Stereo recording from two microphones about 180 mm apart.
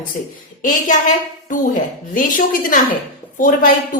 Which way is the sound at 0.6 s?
45° left (ahead or behind).